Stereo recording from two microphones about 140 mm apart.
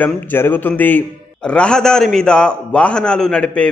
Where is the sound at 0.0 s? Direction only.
15° left (ahead or behind).